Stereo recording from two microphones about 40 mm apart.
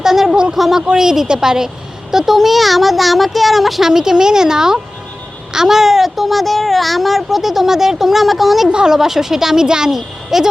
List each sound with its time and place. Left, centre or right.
0.0 s a sound: centre
0.5 s speech: centre
3.8 s speech: centre
8.7 s speech: centre